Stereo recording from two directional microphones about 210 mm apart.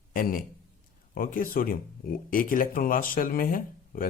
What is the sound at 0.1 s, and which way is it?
A man's voice, 40° left (ahead or behind).